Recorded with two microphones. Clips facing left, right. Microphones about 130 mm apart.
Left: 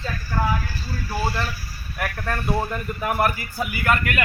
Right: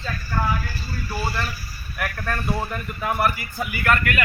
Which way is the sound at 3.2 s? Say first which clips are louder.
Even; 45° left (ahead or behind).